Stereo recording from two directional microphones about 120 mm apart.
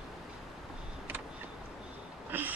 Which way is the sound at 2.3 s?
15° right (ahead or behind).